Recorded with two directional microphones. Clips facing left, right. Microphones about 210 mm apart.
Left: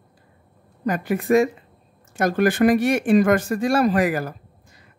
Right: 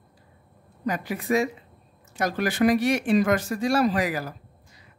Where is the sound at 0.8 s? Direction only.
50° left (ahead or behind).